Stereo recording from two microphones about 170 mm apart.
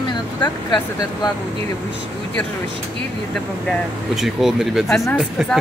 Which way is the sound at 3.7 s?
Centre (ahead or behind).